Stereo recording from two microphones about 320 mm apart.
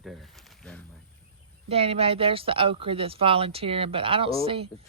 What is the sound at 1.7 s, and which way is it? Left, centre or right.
Speech, centre.